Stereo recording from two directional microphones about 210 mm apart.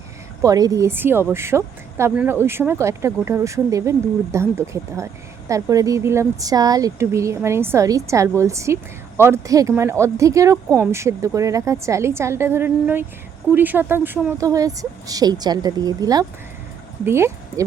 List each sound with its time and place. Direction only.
0.4 s speech: 15° right (ahead or behind)